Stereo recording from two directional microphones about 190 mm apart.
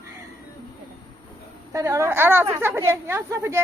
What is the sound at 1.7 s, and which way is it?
A woman's voice, 15° right (ahead or behind).